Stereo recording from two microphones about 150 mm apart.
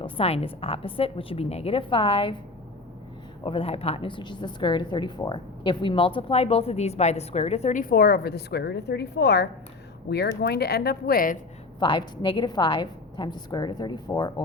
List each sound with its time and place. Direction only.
0.0 s a woman's voice: 40° left (ahead or behind)
3.4 s a woman's voice: 40° left (ahead or behind)
7.8 s a woman's voice: 80° left
11.8 s a woman's voice: 30° left (ahead or behind)